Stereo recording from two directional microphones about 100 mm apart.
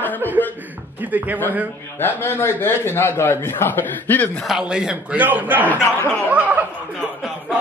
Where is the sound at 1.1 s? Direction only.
15° right (ahead or behind).